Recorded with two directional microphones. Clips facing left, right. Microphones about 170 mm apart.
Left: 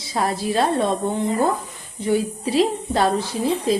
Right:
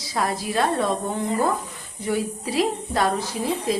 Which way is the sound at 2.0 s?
25° left (ahead or behind).